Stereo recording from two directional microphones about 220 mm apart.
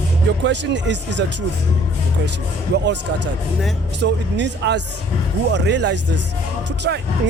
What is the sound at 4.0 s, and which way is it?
Music, 50° right (ahead or behind).